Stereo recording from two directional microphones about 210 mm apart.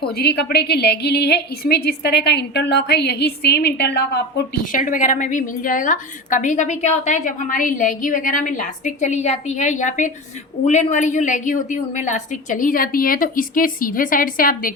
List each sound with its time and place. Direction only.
0.2 s a woman's voice: 50° left (ahead or behind)
4.7 s a woman's voice: 40° left (ahead or behind)